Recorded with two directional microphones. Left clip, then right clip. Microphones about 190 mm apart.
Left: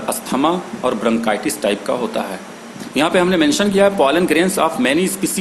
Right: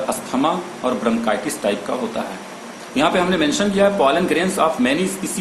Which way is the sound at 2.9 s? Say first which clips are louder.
Left 2 dB; 55° left (ahead or behind).